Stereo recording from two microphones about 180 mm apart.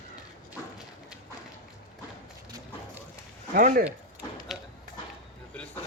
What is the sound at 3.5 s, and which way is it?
Speech, 50° right (ahead or behind).